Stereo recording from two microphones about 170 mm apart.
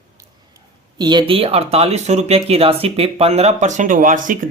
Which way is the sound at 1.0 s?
25° right (ahead or behind).